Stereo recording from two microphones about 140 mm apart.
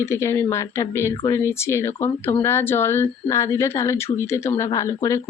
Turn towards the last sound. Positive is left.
turn(degrees=20)  # may be behind; listen again after turning